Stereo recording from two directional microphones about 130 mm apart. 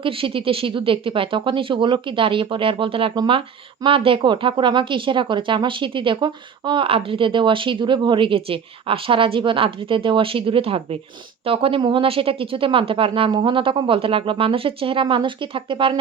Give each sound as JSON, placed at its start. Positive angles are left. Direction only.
{"t": 0.0, "sound": "speech", "side_deg": -45}